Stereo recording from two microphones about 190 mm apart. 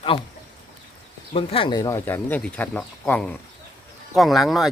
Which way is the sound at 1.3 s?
30° left (ahead or behind).